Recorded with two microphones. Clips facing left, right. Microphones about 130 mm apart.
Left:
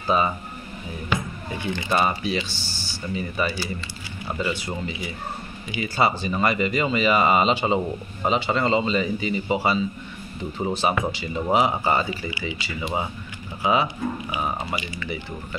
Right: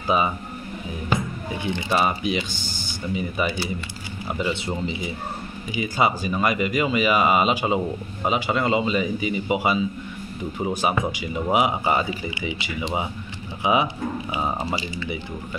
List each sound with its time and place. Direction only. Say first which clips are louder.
0.0 s speech: even; 10° right (ahead or behind)
1.9 s speech: even; 10° right (ahead or behind)
5.8 s speech: even; 10° right (ahead or behind)